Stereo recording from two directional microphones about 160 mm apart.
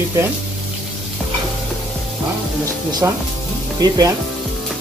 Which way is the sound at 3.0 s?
15° right (ahead or behind).